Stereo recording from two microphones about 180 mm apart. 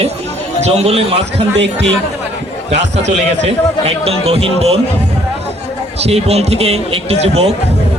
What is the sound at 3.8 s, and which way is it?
Speech, 35° right (ahead or behind).